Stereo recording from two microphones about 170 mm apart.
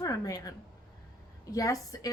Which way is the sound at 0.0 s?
20° left (ahead or behind).